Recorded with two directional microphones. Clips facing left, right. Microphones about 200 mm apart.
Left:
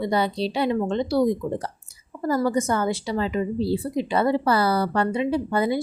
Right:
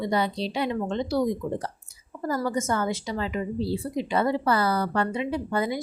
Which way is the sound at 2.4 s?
35° left (ahead or behind).